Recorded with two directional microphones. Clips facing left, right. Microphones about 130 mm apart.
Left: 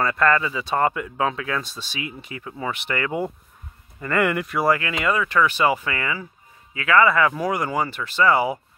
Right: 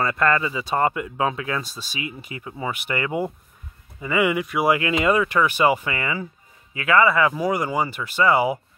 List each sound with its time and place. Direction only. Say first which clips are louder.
0.0 s speech: left 1 dB; 10° right (ahead or behind)
4.6 s speech: right 3 dB; 20° right (ahead or behind)